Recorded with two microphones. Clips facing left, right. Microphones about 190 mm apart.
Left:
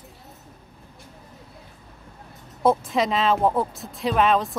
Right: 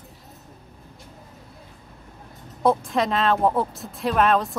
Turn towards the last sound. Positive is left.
turn(degrees=0)  # may be behind; listen again after turning